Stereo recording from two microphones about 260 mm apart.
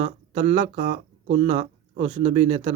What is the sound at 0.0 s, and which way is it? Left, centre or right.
Speech, right.